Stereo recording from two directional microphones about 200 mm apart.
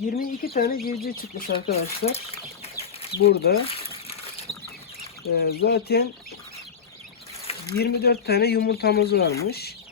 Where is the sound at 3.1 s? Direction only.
55° left (ahead or behind).